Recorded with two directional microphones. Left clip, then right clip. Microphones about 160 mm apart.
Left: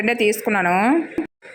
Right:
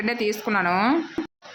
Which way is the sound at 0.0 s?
15° left (ahead or behind).